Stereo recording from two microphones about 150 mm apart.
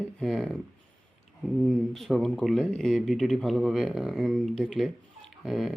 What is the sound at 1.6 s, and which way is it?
Speech, 5° left (ahead or behind).